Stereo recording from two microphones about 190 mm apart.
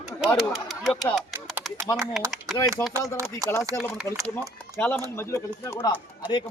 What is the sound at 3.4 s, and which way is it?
Speech, 15° right (ahead or behind).